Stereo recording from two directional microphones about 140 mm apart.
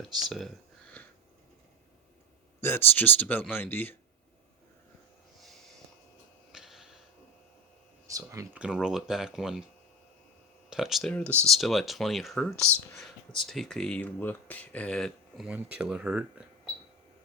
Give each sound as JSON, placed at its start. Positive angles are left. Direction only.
{"t": 0.3, "sound": "a sound", "side_deg": 0}
{"t": 2.6, "sound": "speech", "side_deg": 15}
{"t": 6.5, "sound": "a sound", "side_deg": -5}
{"t": 8.0, "sound": "speech", "side_deg": -25}
{"t": 8.5, "sound": "speech", "side_deg": -5}
{"t": 10.7, "sound": "speech", "side_deg": -5}
{"t": 11.1, "sound": "speech", "side_deg": 10}